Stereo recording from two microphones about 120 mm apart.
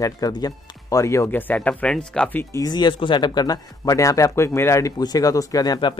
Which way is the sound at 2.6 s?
35° left (ahead or behind).